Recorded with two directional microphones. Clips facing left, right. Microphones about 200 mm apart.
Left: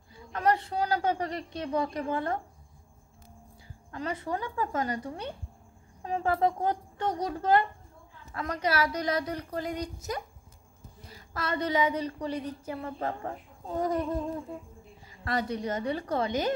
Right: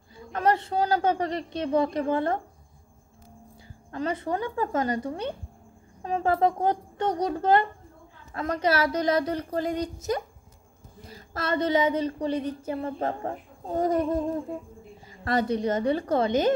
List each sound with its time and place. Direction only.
0.3 s a woman's voice: 25° right (ahead or behind)
3.9 s speech: 25° right (ahead or behind)
6.2 s speech: 25° right (ahead or behind)
12.7 s a woman's voice: 40° right (ahead or behind)
15.2 s speech: 25° right (ahead or behind)